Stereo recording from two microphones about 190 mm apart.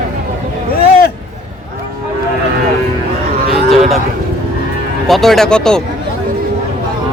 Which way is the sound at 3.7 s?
Centre (ahead or behind).